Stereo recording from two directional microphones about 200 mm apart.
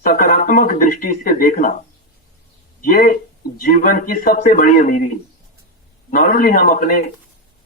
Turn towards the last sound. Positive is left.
turn(degrees=40)  # may be behind; listen again after turning